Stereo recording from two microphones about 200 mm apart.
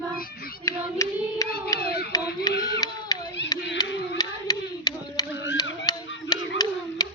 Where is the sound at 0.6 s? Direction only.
15° left (ahead or behind).